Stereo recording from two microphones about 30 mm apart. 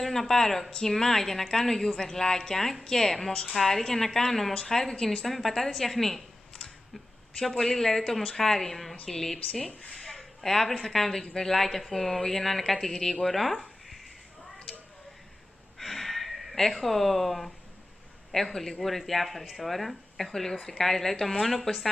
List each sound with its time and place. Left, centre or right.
0.0 s a woman's voice: centre
5.0 s a woman's voice: centre
7.5 s a woman's voice: centre
9.7 s a woman's voice: left
9.9 s a sound: centre
10.8 s a woman's voice: centre
12.8 s speech: centre
15.8 s a sound: centre
16.5 s a woman's voice: centre